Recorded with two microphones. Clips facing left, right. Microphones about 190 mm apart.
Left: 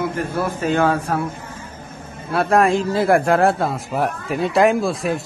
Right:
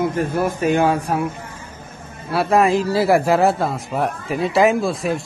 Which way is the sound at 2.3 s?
Centre (ahead or behind).